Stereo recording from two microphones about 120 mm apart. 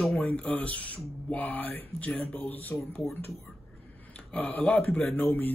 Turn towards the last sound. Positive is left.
turn(degrees=15)  # may be behind; listen again after turning